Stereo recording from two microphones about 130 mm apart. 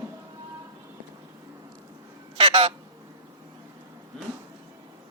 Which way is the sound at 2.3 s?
45° right (ahead or behind).